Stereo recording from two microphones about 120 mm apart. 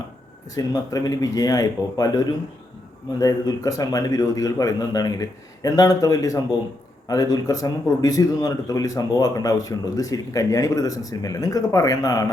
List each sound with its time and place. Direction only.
0.5 s speech: 30° left (ahead or behind)